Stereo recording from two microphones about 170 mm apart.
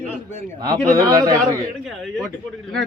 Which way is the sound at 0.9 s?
20° right (ahead or behind).